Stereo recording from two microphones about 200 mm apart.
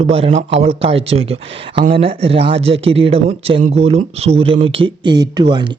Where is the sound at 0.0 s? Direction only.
30° right (ahead or behind).